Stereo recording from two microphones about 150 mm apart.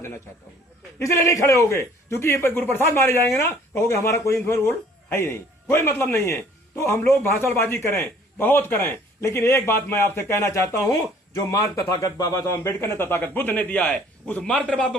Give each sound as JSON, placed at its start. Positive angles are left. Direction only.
{"t": 0.9, "sound": "a man's voice", "side_deg": 20}